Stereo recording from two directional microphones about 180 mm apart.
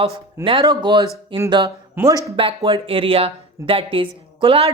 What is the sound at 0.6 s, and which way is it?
Speech, 20° right (ahead or behind).